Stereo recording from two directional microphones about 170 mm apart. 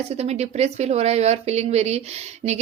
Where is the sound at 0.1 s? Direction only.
40° right (ahead or behind).